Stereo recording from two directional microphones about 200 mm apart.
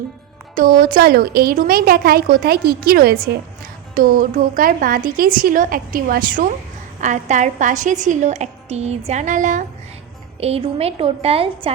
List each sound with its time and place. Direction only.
0.5 s a woman's voice: 45° right (ahead or behind); by 11.7 s 30° right (ahead or behind)